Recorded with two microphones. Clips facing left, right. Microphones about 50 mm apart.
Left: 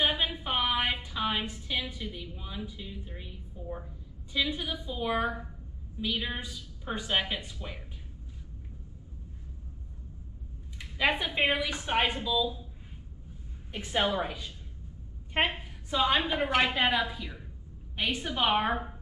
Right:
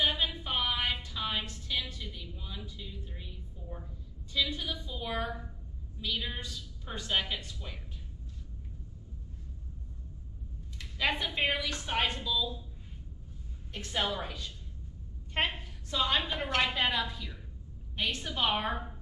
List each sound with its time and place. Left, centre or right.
0.0 s a sound: centre
4.3 s a woman's voice: centre
10.8 s a woman's voice: centre
13.7 s a woman's voice: centre